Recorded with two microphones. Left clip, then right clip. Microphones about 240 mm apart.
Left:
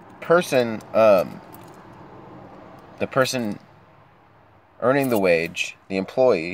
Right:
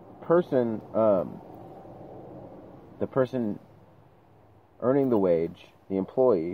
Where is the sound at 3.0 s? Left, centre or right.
Left.